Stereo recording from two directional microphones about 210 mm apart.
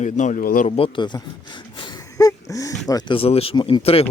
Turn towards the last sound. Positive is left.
turn(degrees=30)  # may be behind; listen again after turning